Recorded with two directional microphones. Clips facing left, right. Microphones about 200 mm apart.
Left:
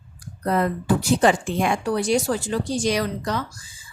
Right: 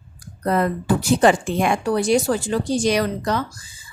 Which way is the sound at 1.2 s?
60° right (ahead or behind).